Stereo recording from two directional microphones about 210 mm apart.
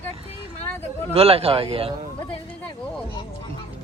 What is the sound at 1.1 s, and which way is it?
Speech, 30° right (ahead or behind).